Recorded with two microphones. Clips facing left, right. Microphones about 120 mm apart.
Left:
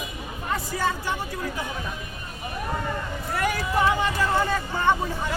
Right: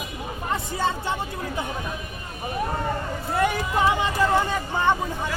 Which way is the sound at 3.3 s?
20° right (ahead or behind).